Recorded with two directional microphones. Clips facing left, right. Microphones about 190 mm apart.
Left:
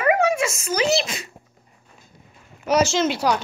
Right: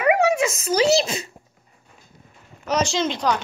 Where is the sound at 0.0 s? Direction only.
15° right (ahead or behind).